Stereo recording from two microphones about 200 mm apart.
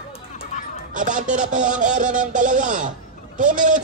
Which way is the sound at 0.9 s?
40° right (ahead or behind).